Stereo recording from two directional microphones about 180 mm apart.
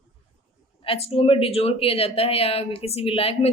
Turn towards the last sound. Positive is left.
turn(degrees=30)  # may be behind; listen again after turning